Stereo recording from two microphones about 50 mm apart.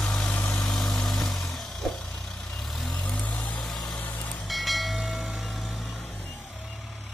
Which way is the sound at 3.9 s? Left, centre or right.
Left.